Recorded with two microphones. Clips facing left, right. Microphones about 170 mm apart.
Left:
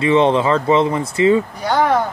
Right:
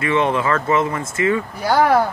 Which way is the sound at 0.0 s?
30° left (ahead or behind).